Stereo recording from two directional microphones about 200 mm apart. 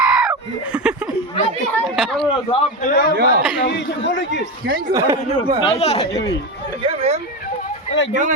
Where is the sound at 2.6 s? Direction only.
40° left (ahead or behind).